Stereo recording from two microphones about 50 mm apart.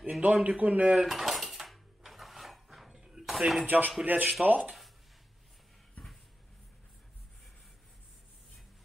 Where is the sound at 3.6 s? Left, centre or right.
Right.